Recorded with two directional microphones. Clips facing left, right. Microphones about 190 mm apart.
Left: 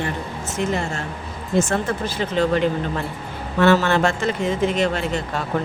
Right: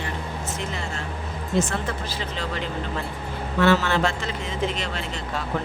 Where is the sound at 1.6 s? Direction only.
50° left (ahead or behind).